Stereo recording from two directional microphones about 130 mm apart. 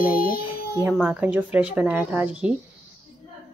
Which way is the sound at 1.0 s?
15° right (ahead or behind).